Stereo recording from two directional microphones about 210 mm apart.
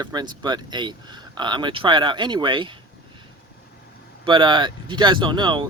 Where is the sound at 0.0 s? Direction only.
20° right (ahead or behind).